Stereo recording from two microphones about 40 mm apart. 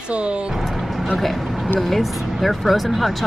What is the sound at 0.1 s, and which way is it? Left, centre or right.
Speech, right.